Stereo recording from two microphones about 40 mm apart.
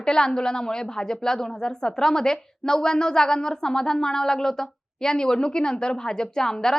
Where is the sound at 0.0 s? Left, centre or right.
Centre.